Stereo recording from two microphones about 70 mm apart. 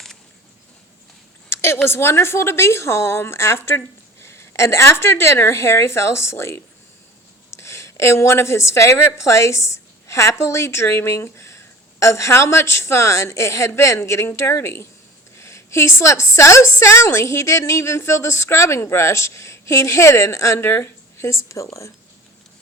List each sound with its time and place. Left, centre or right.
1.5 s a woman's voice: left
20.7 s a woman's voice: left